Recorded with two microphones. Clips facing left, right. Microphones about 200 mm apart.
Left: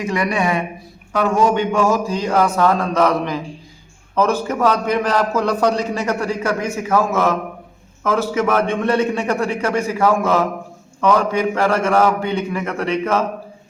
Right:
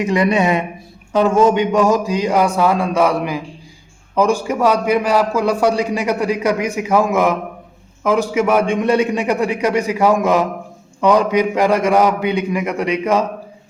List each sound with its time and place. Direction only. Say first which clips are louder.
0.0 s a man's voice: right 4 dB; 20° right (ahead or behind)